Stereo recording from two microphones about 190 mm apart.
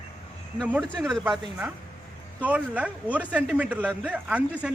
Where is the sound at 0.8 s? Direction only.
5° left (ahead or behind).